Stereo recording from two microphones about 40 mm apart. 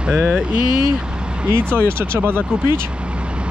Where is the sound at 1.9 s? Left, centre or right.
Right.